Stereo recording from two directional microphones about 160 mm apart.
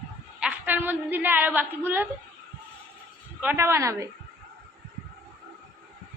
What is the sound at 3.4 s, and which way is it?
Speech, 15° right (ahead or behind).